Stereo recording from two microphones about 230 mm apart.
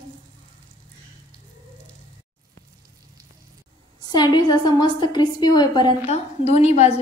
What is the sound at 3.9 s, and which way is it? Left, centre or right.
A woman's voice, centre.